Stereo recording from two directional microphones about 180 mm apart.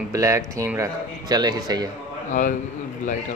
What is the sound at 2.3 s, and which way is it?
Speech, 45° left (ahead or behind).